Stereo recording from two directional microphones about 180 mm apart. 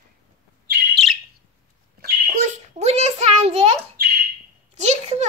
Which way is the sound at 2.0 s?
50° right (ahead or behind).